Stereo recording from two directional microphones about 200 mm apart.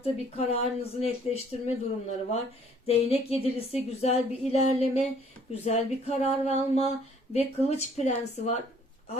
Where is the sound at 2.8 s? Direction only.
30° left (ahead or behind).